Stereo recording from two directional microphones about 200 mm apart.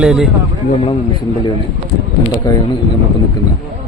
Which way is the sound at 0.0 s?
5° right (ahead or behind).